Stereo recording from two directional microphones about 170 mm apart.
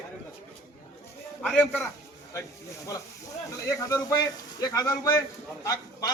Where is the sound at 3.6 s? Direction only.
20° left (ahead or behind).